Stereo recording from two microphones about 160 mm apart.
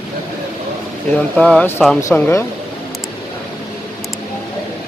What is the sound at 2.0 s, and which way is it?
Speech, 15° left (ahead or behind).